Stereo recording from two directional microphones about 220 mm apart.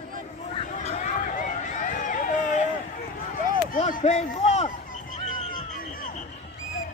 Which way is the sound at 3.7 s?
35° left (ahead or behind).